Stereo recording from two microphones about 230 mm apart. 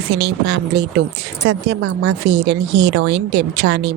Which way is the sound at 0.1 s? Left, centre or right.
Right.